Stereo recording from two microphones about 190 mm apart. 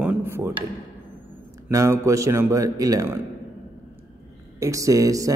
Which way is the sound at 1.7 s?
15° right (ahead or behind).